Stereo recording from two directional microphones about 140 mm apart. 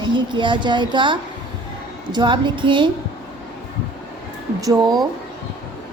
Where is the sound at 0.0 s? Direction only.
35° right (ahead or behind).